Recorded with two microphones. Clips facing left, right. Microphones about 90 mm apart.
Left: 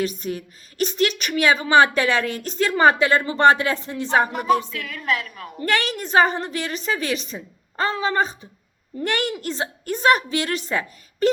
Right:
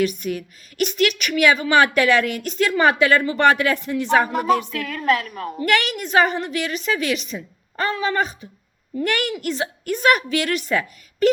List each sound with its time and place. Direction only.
0.0 s a woman's voice: 35° left (ahead or behind)
4.3 s a capella: 40° right (ahead or behind)
4.7 s a woman's voice: 40° right (ahead or behind)
5.6 s a woman's voice: 35° left (ahead or behind)